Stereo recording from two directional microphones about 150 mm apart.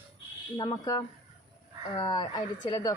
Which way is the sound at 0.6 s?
25° left (ahead or behind).